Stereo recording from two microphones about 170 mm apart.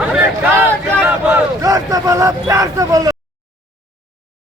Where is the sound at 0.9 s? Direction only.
10° right (ahead or behind).